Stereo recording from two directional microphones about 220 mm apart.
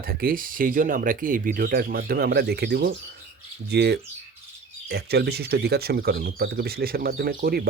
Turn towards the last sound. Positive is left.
turn(degrees=-45)  # may be behind; listen again after turning